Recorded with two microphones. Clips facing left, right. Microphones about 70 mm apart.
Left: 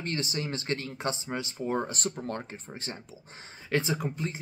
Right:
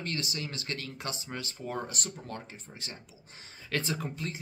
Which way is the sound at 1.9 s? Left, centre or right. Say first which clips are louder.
Left 6 dB; left.